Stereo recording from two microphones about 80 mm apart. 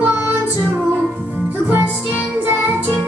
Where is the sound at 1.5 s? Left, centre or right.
Right.